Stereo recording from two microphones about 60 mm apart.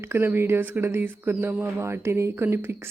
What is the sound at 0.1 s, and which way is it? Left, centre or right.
Speech, right.